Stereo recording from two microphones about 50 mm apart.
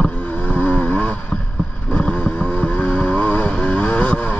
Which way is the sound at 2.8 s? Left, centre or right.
Left.